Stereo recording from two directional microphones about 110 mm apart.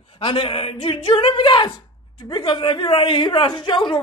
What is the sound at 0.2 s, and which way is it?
Speech, 60° left (ahead or behind).